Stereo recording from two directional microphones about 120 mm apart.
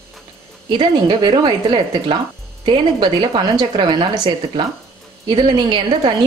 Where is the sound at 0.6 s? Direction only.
40° right (ahead or behind).